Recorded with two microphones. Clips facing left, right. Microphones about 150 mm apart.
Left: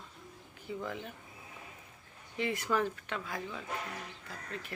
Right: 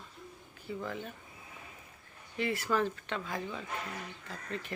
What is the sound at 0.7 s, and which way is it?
Speech, 15° left (ahead or behind).